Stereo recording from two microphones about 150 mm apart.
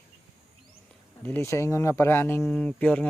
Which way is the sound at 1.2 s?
15° left (ahead or behind).